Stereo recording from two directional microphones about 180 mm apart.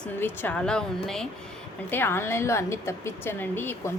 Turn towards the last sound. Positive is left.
turn(degrees=10)  # may be behind; listen again after turning